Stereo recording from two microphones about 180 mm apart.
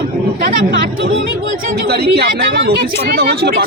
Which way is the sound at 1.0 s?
90° right.